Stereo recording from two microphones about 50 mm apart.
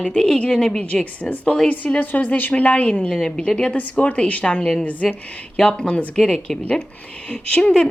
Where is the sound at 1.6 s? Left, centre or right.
Left.